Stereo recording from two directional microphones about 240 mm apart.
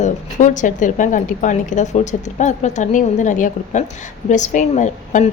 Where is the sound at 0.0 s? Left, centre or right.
Left.